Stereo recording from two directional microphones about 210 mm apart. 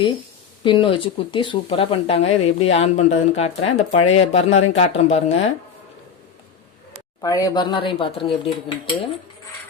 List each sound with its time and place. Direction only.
0.6 s speech: 25° left (ahead or behind)
7.2 s speech: 15° left (ahead or behind)